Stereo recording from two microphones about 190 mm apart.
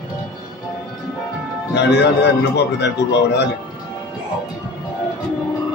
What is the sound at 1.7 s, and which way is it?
A man's voice, 65° left (ahead or behind).